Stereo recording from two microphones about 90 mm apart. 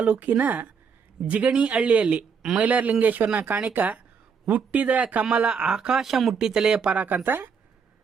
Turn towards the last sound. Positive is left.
turn(degrees=-20)  # may be behind; listen again after turning